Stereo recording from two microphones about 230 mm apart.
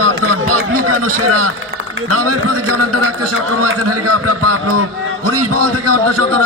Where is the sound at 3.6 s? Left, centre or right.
Right.